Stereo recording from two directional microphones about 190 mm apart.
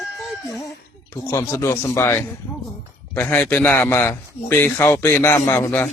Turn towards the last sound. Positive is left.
turn(degrees=10)  # may be behind; listen again after turning